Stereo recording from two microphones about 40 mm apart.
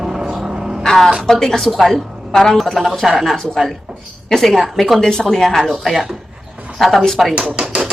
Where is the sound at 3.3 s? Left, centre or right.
Centre.